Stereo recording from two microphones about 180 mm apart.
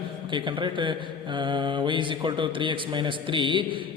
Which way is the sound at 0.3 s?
25° right (ahead or behind).